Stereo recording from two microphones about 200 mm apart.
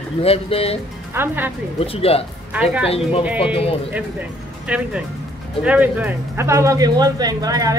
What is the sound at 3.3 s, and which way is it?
Speech, 25° left (ahead or behind).